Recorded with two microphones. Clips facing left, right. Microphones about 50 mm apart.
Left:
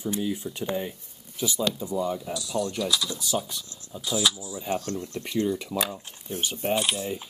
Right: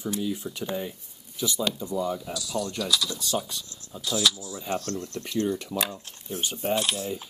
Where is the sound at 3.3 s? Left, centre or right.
Centre.